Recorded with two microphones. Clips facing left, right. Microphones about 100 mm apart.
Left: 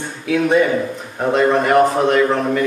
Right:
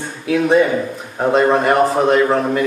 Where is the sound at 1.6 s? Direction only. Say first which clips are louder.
Even; centre (ahead or behind).